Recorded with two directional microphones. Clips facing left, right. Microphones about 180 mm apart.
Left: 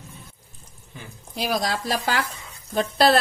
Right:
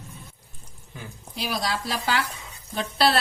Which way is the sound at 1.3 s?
45° left (ahead or behind).